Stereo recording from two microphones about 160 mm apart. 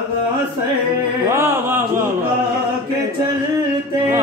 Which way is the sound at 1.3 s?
15° right (ahead or behind).